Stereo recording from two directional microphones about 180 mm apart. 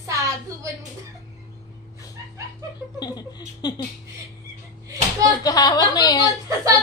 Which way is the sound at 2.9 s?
25° left (ahead or behind).